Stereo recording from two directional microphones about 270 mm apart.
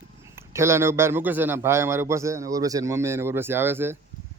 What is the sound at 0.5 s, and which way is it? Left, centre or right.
A man's voice, centre.